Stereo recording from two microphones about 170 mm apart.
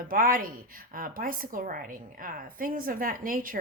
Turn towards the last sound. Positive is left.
turn(degrees=-55)  # may be behind; listen again after turning